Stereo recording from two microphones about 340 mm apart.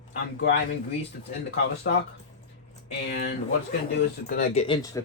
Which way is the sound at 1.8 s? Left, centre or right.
Left.